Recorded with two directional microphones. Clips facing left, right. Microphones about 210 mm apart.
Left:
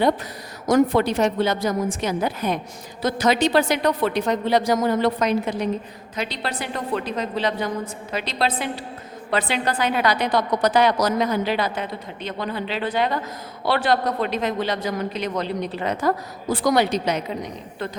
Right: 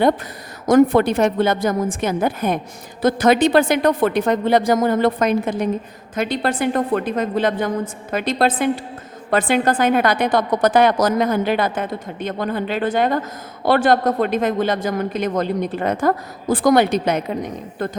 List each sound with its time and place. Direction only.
0.7 s a woman's voice: 55° right (ahead or behind)